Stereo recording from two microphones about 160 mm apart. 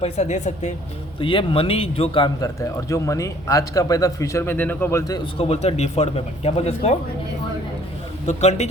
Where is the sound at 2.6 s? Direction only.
20° left (ahead or behind).